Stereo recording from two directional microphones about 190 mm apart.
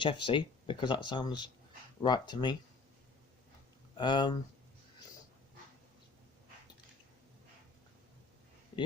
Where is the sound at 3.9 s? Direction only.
25° left (ahead or behind).